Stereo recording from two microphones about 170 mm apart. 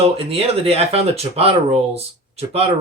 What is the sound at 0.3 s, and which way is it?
Speech, 35° right (ahead or behind).